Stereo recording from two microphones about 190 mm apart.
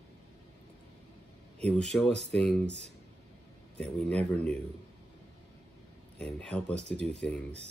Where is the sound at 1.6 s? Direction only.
5° left (ahead or behind).